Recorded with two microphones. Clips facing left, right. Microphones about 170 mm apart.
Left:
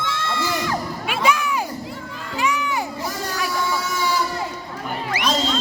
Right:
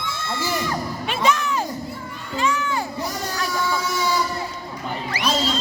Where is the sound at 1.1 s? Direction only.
10° left (ahead or behind).